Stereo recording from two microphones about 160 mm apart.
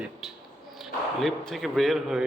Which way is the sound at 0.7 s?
Centre (ahead or behind).